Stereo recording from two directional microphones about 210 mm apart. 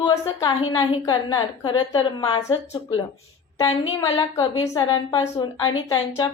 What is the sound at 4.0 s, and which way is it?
A woman's voice, 20° left (ahead or behind).